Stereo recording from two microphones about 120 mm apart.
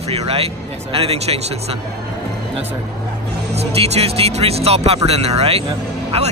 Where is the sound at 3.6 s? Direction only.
60° right (ahead or behind).